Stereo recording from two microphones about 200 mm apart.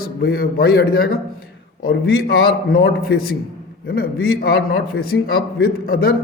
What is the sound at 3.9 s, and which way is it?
A man's voice, 50° left (ahead or behind).